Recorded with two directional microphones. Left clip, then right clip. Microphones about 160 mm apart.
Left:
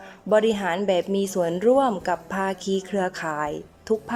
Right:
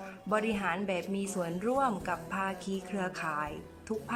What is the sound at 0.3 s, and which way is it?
A woman's voice, 35° left (ahead or behind).